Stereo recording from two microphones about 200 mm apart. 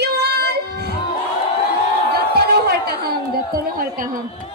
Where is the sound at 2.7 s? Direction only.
50° right (ahead or behind).